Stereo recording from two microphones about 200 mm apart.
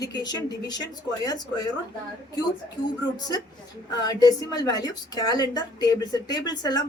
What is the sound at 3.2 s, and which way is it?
A woman's voice, 20° left (ahead or behind).